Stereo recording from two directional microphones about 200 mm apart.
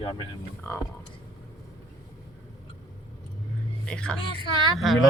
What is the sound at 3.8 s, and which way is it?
Speech, 5° left (ahead or behind).